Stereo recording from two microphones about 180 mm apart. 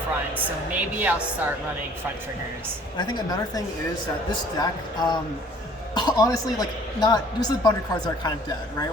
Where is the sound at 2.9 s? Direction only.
25° left (ahead or behind).